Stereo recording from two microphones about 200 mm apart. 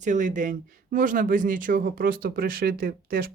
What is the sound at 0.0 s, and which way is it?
Speech, 40° right (ahead or behind).